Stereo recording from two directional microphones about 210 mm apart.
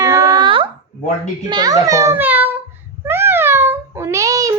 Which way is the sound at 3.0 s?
10° right (ahead or behind).